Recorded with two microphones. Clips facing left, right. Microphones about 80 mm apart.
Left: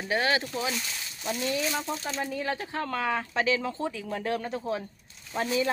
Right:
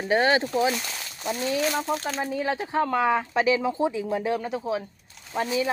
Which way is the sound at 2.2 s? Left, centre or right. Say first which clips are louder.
Right 4 dB; centre.